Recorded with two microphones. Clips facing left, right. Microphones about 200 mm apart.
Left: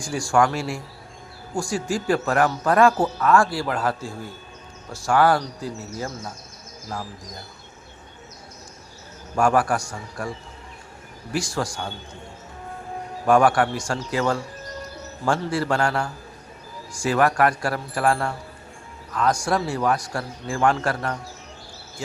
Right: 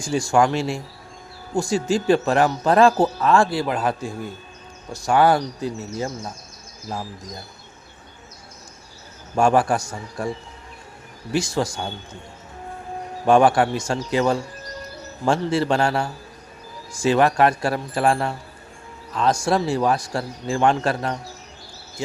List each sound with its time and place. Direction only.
0.0 s a man's voice: 25° right (ahead or behind)
9.3 s a man's voice: 25° right (ahead or behind)
11.3 s a man's voice: 20° right (ahead or behind)
13.2 s a man's voice: 25° right (ahead or behind)